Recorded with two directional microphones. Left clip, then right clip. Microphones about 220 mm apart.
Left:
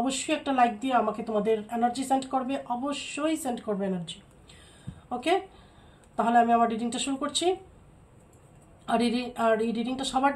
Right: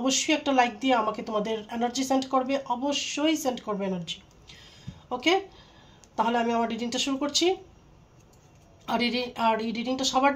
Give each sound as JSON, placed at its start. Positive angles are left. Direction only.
{"t": 0.0, "sound": "speech", "side_deg": -35}
{"t": 6.1, "sound": "speech", "side_deg": -35}
{"t": 8.8, "sound": "speech", "side_deg": -35}